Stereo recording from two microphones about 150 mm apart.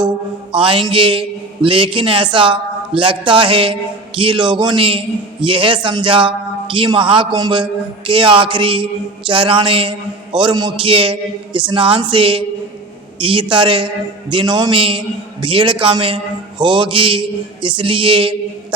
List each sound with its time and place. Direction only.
0.5 s a man's voice: 35° right (ahead or behind)